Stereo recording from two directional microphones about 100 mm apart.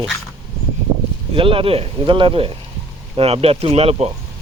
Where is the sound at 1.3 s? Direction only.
65° right (ahead or behind).